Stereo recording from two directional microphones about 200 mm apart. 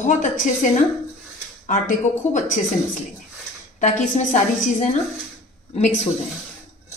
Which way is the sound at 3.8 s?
40° left (ahead or behind).